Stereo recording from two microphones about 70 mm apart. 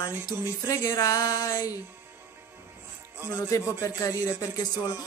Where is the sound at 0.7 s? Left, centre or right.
Left.